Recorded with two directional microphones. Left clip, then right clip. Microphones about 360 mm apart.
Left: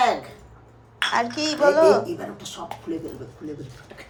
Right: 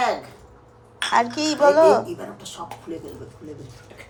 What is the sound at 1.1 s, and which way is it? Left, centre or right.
Speech, centre.